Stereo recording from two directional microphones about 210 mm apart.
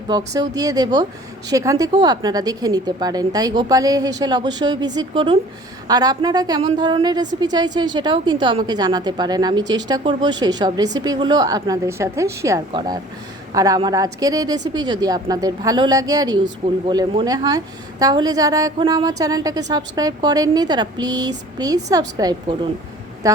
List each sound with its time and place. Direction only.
0.1 s a woman's voice: 15° right (ahead or behind)